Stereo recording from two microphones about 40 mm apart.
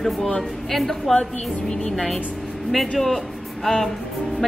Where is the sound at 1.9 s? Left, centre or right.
Centre.